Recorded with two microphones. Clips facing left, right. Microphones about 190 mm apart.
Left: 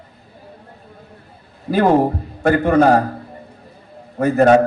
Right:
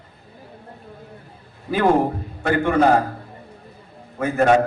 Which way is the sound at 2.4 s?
40° left (ahead or behind).